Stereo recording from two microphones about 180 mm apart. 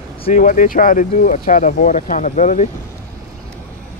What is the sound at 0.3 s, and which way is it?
Speech, 45° left (ahead or behind).